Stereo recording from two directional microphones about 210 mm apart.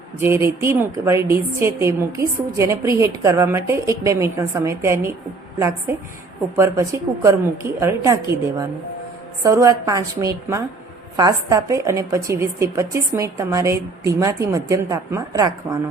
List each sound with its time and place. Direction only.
0.2 s a woman's voice: 10° right (ahead or behind)
6.6 s a woman's voice: 15° right (ahead or behind)